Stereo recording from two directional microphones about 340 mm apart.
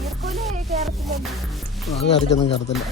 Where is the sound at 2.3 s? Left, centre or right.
Left.